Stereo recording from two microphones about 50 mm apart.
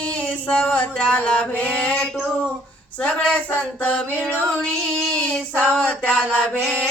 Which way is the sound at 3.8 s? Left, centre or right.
Left.